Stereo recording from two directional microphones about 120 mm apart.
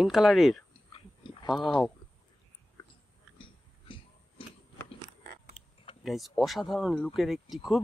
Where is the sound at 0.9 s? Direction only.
45° left (ahead or behind).